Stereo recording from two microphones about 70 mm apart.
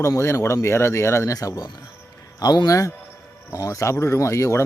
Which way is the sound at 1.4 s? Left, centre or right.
Left.